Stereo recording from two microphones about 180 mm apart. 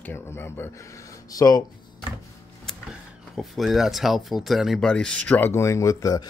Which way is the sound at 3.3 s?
Centre (ahead or behind).